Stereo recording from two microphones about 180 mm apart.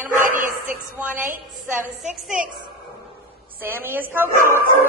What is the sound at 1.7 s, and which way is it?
Speech, 10° right (ahead or behind).